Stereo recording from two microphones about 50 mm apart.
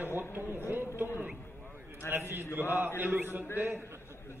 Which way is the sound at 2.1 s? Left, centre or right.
Right.